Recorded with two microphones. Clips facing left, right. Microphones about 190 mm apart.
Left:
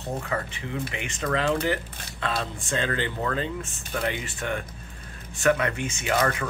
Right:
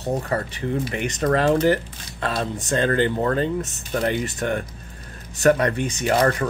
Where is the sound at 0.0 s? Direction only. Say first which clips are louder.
Right 6 dB; 40° right (ahead or behind).